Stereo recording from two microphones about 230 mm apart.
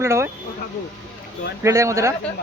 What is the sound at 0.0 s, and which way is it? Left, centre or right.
Speech, centre.